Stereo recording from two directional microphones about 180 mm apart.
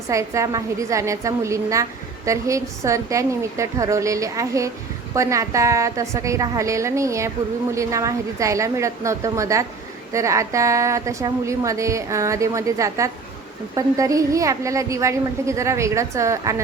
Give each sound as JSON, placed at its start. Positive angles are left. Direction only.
{"t": 0.1, "sound": "a woman's voice", "side_deg": -15}